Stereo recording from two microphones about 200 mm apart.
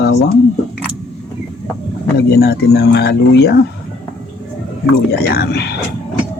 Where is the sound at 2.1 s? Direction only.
55° left (ahead or behind).